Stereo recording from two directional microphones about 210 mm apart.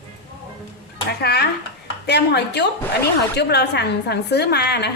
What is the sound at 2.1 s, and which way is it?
A woman's voice, 55° left (ahead or behind).